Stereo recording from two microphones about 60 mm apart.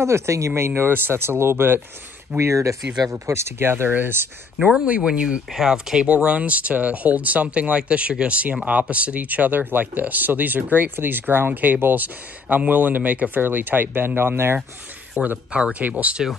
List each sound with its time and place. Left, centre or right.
0.0 s speech: right
0.6 s speech: right
4.6 s speech: centre